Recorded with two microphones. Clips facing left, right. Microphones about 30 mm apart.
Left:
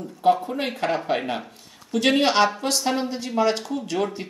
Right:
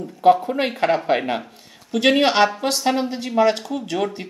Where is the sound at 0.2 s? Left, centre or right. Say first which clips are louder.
Right 5 dB; centre.